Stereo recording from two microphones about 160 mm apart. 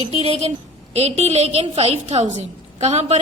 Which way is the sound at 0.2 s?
40° right (ahead or behind).